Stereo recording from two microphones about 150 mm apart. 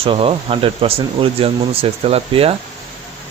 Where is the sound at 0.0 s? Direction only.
40° right (ahead or behind).